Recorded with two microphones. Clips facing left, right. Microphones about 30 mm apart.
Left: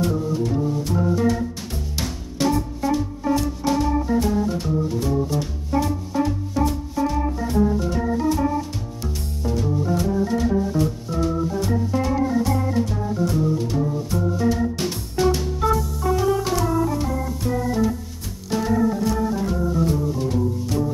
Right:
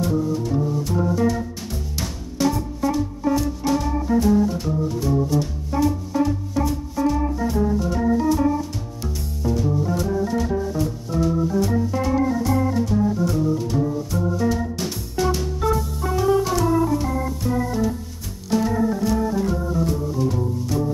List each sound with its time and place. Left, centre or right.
0.0 s music: centre
2.0 s music: left
2.8 s music: centre
7.0 s organ: centre
9.4 s organ: centre
14.8 s music: centre
16.0 s music: centre
16.5 s organ: centre